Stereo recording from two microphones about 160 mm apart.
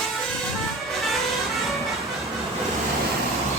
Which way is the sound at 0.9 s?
Centre (ahead or behind).